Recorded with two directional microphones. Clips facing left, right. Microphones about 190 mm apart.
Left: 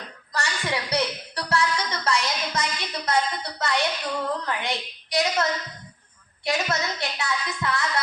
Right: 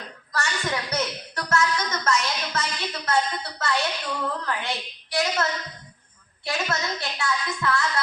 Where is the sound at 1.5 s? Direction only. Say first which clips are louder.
Right 1 dB; 35° left (ahead or behind).